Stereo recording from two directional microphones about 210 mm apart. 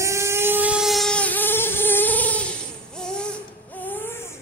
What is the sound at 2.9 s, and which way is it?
Baby cry, 5° left (ahead or behind).